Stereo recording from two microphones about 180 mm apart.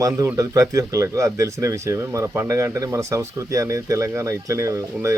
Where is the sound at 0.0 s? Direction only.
20° right (ahead or behind).